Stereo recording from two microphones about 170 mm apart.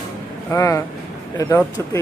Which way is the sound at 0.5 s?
15° left (ahead or behind).